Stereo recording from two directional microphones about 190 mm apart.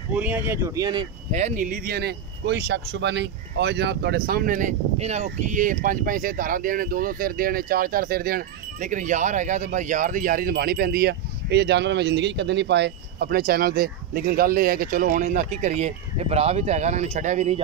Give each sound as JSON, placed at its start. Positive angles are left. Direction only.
{"t": 0.1, "sound": "speech", "side_deg": -10}
{"t": 1.3, "sound": "speech", "side_deg": -40}